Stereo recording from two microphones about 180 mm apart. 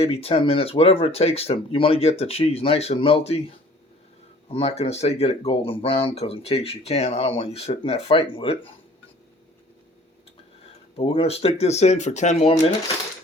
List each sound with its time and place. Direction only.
0.0 s speech: 35° left (ahead or behind)
4.4 s speech: 30° left (ahead or behind)
10.9 s speech: 30° left (ahead or behind)